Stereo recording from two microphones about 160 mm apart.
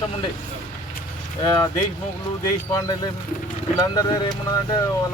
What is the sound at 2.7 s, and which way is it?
A man's voice, 25° left (ahead or behind).